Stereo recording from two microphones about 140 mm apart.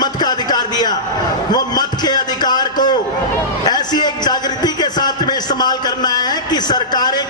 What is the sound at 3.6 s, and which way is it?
A man's voice, 30° left (ahead or behind).